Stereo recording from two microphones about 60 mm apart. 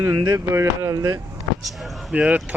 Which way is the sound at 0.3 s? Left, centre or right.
Right.